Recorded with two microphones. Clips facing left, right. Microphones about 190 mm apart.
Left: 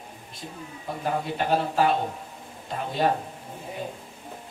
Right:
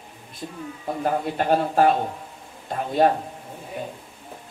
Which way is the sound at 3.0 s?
55° right (ahead or behind).